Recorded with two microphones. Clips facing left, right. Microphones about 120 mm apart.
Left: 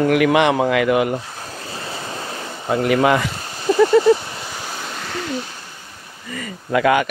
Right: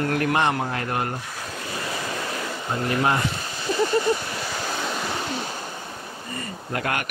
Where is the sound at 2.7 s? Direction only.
90° left.